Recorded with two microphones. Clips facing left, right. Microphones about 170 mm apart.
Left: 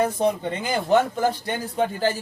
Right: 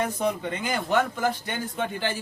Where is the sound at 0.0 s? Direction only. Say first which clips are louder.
Left 5 dB; 35° left (ahead or behind).